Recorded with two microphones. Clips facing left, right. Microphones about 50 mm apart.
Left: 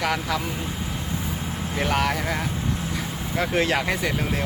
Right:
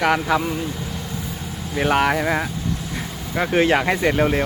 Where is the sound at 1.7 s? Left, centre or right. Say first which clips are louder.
Right 6 dB; right.